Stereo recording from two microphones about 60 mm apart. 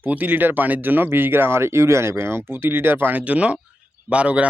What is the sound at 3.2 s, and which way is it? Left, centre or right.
Speech, right.